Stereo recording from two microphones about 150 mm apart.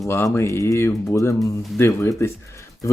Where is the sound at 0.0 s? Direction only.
20° left (ahead or behind).